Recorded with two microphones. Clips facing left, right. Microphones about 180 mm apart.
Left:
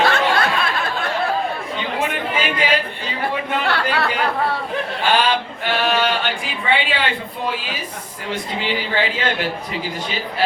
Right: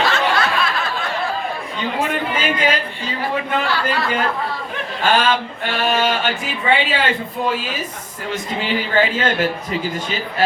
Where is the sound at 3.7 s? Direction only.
65° left (ahead or behind).